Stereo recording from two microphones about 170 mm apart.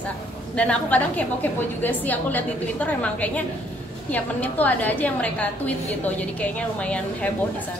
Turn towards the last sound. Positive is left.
turn(degrees=10)  # may be behind; listen again after turning